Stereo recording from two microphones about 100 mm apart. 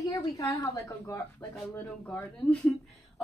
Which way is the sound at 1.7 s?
20° left (ahead or behind).